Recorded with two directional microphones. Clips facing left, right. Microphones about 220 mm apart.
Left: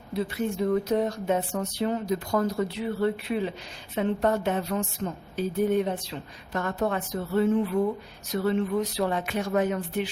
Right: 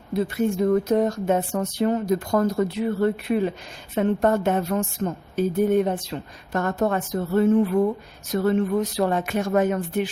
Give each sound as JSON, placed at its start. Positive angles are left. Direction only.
{"t": 0.1, "sound": "speech", "side_deg": -50}